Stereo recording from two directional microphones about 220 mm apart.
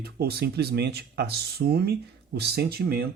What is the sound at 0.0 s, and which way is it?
Speech, 45° right (ahead or behind).